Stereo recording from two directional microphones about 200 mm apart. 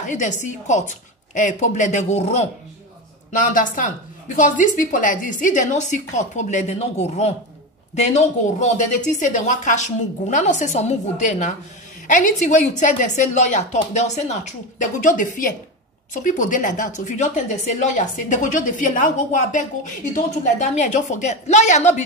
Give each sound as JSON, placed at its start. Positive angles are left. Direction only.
{"t": 0.1, "sound": "a woman's voice", "side_deg": 35}